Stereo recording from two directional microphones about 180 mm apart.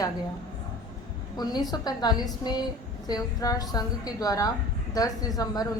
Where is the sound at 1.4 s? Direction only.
20° left (ahead or behind).